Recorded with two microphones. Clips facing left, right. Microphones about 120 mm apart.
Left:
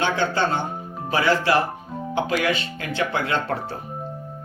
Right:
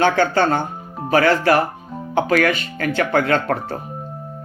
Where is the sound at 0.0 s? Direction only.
55° right (ahead or behind).